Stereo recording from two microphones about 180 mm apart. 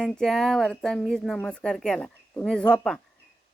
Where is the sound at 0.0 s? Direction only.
5° left (ahead or behind).